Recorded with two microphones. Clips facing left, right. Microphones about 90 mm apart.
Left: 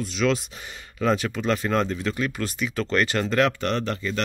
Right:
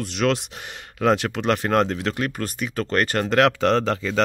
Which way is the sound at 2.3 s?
45° right (ahead or behind).